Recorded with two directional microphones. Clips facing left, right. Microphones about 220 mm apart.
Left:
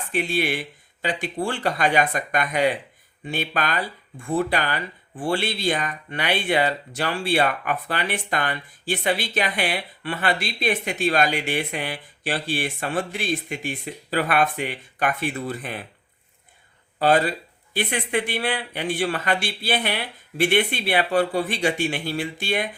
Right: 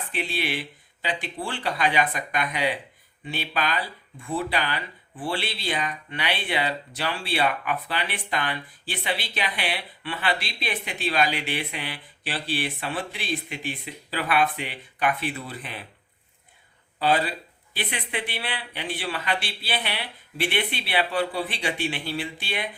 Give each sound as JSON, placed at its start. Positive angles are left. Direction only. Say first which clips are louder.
{"t": 0.1, "sound": "speech", "louder": "left 6 dB", "side_deg": 45}
{"t": 17.0, "sound": "speech", "louder": "left 4 dB", "side_deg": 45}